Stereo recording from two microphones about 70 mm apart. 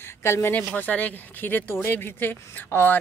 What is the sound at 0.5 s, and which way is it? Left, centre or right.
Speech, left.